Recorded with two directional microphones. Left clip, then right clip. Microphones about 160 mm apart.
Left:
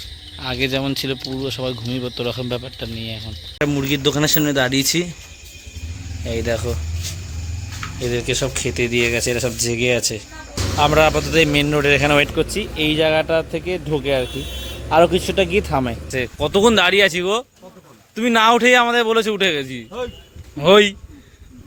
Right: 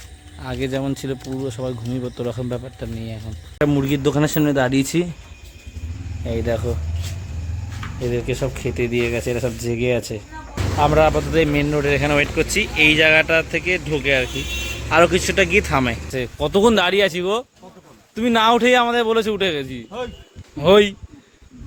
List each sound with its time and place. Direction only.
0.3 s speech: 5° left (ahead or behind)
3.6 s a man's voice: 15° right (ahead or behind)
6.2 s speech: 5° right (ahead or behind)
8.0 s speech: 5° right (ahead or behind); by 14.3 s 15° left (ahead or behind)
14.8 s a man's voice: 5° left (ahead or behind)